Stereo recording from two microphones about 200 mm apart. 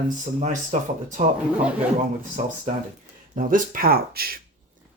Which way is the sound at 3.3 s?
40° right (ahead or behind).